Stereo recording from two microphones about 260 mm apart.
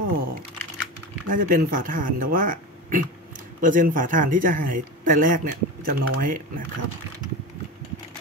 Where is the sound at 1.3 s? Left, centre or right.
Right.